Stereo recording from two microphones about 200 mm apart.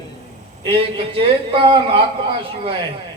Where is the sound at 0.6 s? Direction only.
25° right (ahead or behind).